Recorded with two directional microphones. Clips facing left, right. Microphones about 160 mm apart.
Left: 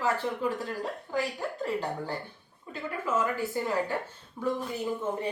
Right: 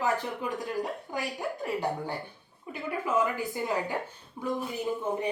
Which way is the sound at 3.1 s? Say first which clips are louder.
Even; 15° right (ahead or behind).